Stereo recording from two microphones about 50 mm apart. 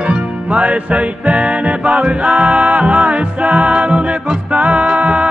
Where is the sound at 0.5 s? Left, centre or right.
Right.